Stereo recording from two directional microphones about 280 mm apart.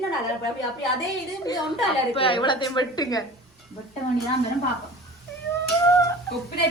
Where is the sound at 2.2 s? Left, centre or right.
Centre.